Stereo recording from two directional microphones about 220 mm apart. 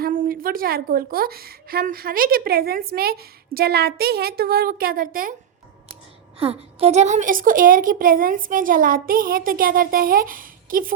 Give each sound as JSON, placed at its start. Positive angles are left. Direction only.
{"t": 0.0, "sound": "a woman's voice", "side_deg": -40}
{"t": 6.4, "sound": "a woman's voice", "side_deg": -25}